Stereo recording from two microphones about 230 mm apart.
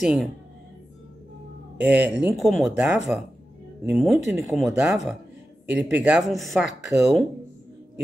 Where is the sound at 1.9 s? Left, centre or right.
Centre.